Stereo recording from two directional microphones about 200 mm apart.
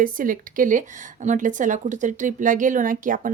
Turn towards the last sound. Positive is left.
turn(degrees=-40)  # may be behind; listen again after turning